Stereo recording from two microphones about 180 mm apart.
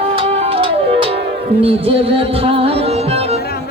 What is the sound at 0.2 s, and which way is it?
Music, 35° right (ahead or behind).